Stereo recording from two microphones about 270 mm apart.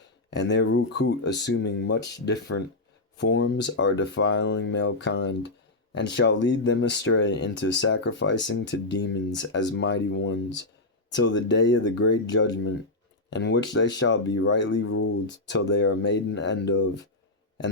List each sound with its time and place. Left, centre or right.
0.0 s speech: left